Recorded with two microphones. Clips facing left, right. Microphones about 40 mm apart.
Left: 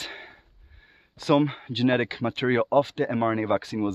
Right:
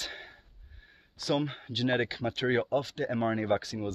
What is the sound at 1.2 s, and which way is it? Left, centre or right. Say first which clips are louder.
Speech: left 9 dB; left.